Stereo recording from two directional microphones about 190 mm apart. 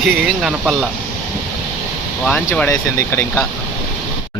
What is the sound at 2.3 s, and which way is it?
Speech, 5° left (ahead or behind).